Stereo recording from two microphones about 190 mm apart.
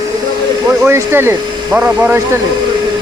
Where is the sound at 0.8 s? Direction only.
10° right (ahead or behind).